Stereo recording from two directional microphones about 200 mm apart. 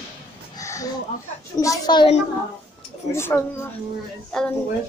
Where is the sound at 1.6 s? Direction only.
20° left (ahead or behind).